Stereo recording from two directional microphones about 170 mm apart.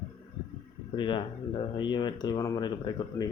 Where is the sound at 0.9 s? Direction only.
30° left (ahead or behind).